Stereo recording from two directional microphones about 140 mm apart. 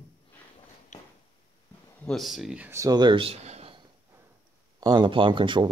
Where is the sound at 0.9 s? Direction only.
55° left (ahead or behind).